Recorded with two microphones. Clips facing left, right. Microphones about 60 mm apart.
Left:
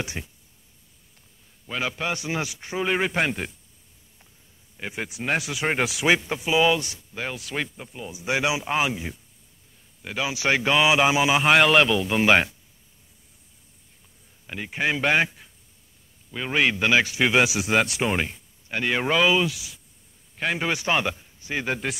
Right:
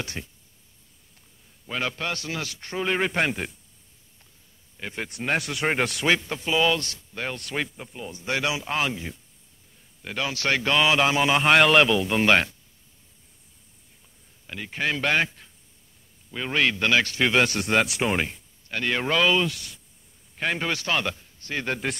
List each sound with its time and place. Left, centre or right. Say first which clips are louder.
0.0 s a man's voice: left 2 dB; centre
1.7 s a man's voice: left 1 dB; centre
4.7 s a man's voice: left 1 dB; centre
7.2 s speech: even; centre
8.2 s a man's voice: left 3 dB; centre
14.4 s a man's voice: left 2 dB; centre
18.7 s a man's voice: left 2 dB; centre